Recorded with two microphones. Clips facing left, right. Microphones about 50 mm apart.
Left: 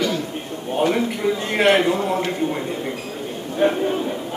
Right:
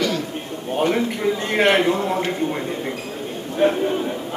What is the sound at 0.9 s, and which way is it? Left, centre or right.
A man's voice, centre.